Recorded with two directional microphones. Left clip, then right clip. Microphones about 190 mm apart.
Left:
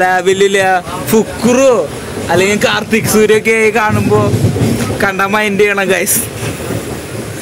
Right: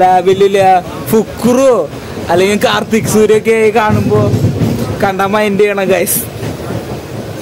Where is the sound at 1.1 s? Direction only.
20° right (ahead or behind); by 6.0 s 5° right (ahead or behind).